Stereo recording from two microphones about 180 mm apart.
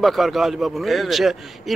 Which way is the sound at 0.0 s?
Centre (ahead or behind).